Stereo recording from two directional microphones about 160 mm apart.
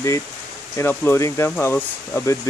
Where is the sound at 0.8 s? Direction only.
15° left (ahead or behind).